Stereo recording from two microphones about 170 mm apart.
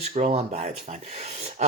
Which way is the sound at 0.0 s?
40° right (ahead or behind).